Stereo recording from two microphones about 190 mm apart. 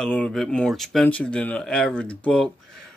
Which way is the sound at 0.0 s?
5° left (ahead or behind).